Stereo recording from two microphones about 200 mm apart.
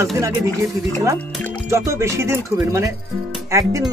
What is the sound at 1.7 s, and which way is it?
Music, 15° right (ahead or behind).